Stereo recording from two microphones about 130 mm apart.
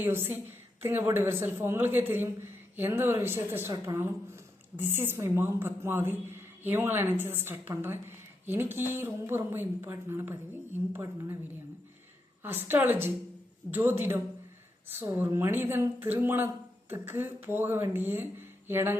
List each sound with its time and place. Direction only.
0.0 s a woman's voice: 15° right (ahead or behind)
12.4 s a woman's voice: 15° right (ahead or behind)